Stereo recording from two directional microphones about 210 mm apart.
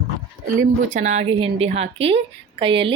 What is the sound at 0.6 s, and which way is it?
A woman's voice, 35° right (ahead or behind).